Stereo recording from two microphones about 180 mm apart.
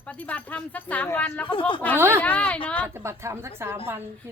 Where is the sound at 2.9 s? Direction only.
15° right (ahead or behind).